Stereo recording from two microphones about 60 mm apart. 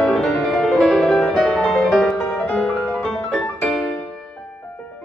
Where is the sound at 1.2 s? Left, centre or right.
Centre.